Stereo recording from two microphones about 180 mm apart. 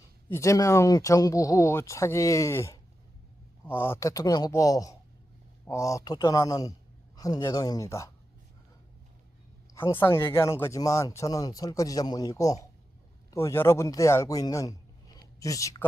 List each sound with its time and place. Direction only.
0.3 s a man's voice: 15° left (ahead or behind)
10.0 s a man's voice: 15° left (ahead or behind)